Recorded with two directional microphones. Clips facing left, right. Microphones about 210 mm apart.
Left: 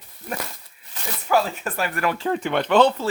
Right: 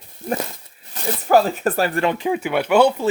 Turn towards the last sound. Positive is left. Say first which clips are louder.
# right 2 dB
turn(degrees=-10)  # may be behind; listen again after turning